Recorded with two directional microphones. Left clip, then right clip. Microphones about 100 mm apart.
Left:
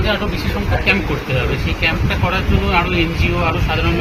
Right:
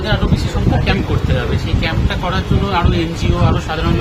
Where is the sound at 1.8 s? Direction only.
25° right (ahead or behind).